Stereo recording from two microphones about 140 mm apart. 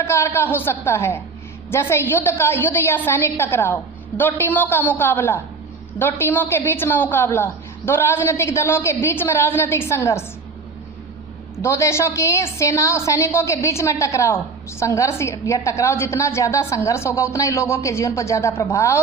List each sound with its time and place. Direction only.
0.0 s a woman's voice: 20° left (ahead or behind)
11.6 s a woman's voice: 20° left (ahead or behind)